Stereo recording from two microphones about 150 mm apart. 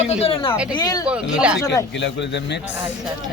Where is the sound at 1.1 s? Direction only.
5° right (ahead or behind).